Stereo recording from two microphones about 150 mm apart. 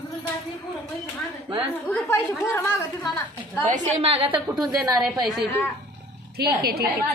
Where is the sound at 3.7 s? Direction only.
40° right (ahead or behind).